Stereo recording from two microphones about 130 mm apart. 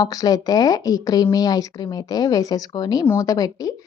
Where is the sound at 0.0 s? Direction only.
30° left (ahead or behind).